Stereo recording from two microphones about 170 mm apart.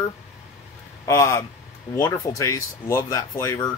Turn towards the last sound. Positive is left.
turn(degrees=20)  # may be behind; listen again after turning